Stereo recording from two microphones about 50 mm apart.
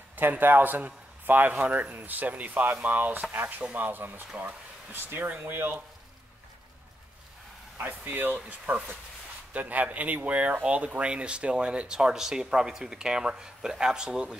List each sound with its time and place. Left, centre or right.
0.1 s a man's voice: right
7.7 s speech: right; by 14.4 s centre